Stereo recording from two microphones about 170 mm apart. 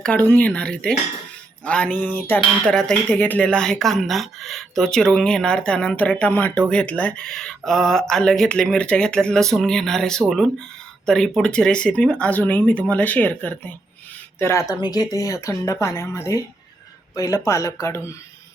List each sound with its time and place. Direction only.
0.0 s speech: 10° left (ahead or behind)